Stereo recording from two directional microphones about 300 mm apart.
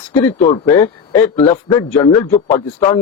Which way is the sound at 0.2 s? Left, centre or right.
Centre.